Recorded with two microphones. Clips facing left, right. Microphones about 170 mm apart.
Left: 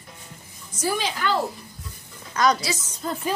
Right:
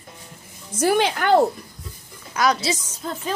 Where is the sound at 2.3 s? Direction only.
5° right (ahead or behind).